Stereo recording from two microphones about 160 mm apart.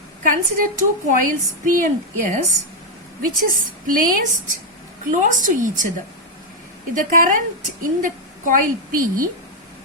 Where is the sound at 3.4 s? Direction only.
60° right (ahead or behind).